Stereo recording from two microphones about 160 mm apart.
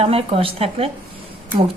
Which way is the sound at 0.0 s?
35° right (ahead or behind).